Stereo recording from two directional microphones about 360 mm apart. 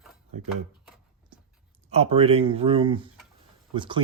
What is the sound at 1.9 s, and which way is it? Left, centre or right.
Speech, centre.